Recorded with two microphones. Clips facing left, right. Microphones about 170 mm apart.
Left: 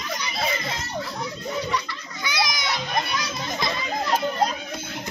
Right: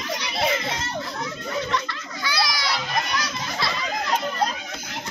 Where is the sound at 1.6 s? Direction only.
10° left (ahead or behind).